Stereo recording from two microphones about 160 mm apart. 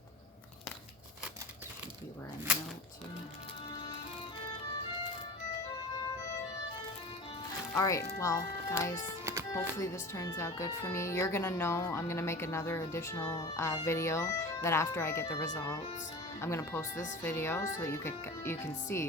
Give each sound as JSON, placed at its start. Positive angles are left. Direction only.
{"t": 7.7, "sound": "speech", "side_deg": 20}
{"t": 9.2, "sound": "music", "side_deg": -15}
{"t": 9.5, "sound": "speech", "side_deg": 20}